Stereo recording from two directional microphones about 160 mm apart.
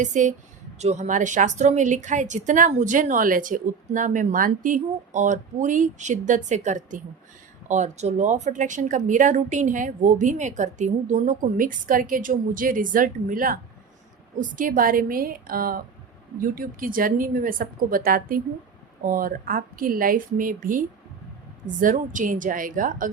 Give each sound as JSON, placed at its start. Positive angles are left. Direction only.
{"t": 0.0, "sound": "a woman's voice", "side_deg": -50}